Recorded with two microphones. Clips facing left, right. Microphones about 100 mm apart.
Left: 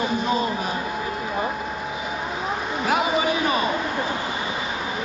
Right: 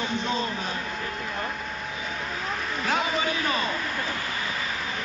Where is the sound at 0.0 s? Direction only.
10° left (ahead or behind); by 4.6 s 25° left (ahead or behind).